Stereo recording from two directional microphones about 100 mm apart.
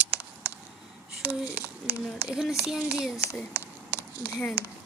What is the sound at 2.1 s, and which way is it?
Speech, 5° right (ahead or behind).